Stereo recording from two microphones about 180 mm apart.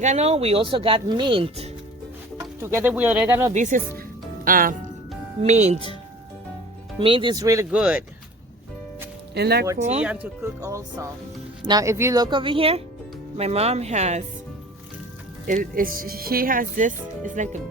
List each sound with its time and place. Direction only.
0.0 s speech: 40° right (ahead or behind)
2.4 s speech: 15° right (ahead or behind)
3.5 s speech: 45° right (ahead or behind)
5.4 s speech: 40° right (ahead or behind)
7.0 s speech: 30° right (ahead or behind)
7.8 s speech: 5° right (ahead or behind)
9.3 s speech: 65° right (ahead or behind)
9.7 s speech: 40° right (ahead or behind)
10.0 s speech: 10° right (ahead or behind); by 14.3 s 40° right (ahead or behind)
15.4 s speech: 50° right (ahead or behind)